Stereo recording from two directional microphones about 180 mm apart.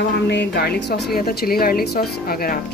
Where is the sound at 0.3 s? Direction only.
70° left (ahead or behind).